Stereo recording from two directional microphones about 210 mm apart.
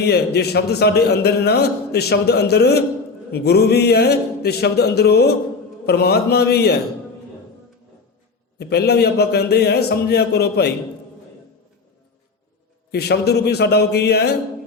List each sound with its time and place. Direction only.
0.0 s a man's voice: 50° left (ahead or behind)
8.5 s a man's voice: 50° left (ahead or behind)
12.9 s a man's voice: 50° left (ahead or behind)